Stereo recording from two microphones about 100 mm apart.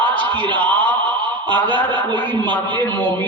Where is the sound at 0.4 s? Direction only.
15° left (ahead or behind).